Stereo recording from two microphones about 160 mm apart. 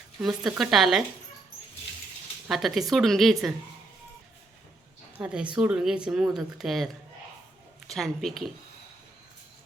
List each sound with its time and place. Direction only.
0.2 s speech: 5° right (ahead or behind)
2.5 s speech: centre (ahead or behind)
5.2 s speech: 5° right (ahead or behind)